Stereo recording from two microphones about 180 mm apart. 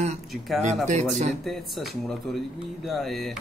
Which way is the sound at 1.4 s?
Centre (ahead or behind).